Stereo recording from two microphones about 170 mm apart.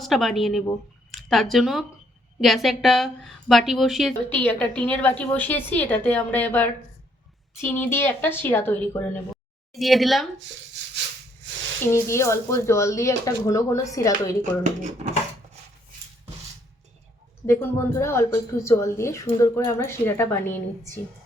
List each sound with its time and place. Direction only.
0.0 s a woman's voice: centre (ahead or behind)
4.4 s a woman's voice: 10° left (ahead or behind)
9.7 s a woman's voice: centre (ahead or behind)
11.9 s a woman's voice: 15° left (ahead or behind)
14.6 s speech: 45° right (ahead or behind)
17.4 s a woman's voice: 15° left (ahead or behind)